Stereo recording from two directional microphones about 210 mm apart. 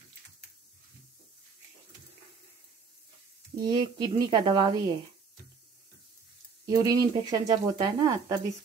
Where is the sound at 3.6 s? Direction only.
20° right (ahead or behind).